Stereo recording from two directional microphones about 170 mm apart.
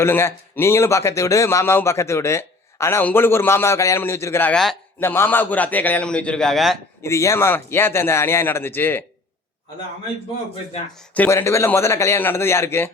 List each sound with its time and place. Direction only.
0.0 s a man's voice: 15° left (ahead or behind)
4.9 s a man's voice: 15° left (ahead or behind)
7.0 s a man's voice: 15° left (ahead or behind)
11.1 s a man's voice: 10° left (ahead or behind)